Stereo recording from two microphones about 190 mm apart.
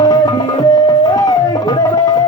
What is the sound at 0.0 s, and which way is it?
Music, 20° left (ahead or behind).